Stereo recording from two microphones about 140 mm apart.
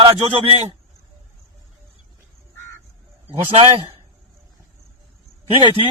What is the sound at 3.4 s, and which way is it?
Speech, 45° right (ahead or behind).